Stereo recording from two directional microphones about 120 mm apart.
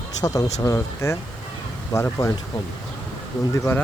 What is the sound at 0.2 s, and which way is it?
Speech, 25° left (ahead or behind).